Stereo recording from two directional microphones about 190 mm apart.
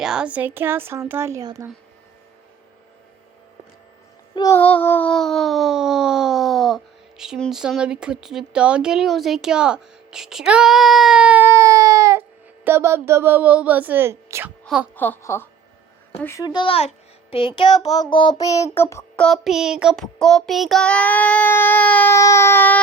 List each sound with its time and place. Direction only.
0.0 s speech: 5° right (ahead or behind)
4.4 s a sound: 15° left (ahead or behind); by 12.2 s 15° right (ahead or behind)
12.6 s speech: 15° right (ahead or behind)
14.6 s a sound: centre (ahead or behind)
14.9 s child singing: 10° left (ahead or behind)
16.6 s child singing: 30° left (ahead or behind); by 19.2 s 15° left (ahead or behind)
19.2 s child singing: centre (ahead or behind)